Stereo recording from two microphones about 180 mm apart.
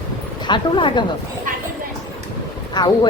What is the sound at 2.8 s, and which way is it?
Speech, 25° left (ahead or behind).